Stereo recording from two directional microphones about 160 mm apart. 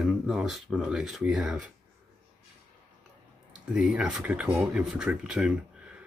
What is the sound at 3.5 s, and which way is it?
Speech, 5° right (ahead or behind).